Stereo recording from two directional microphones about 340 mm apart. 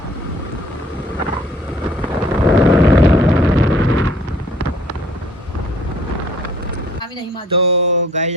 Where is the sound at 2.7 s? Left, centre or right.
Centre.